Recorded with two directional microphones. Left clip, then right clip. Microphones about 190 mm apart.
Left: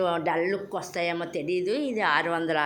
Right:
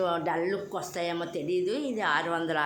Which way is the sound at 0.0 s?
15° left (ahead or behind).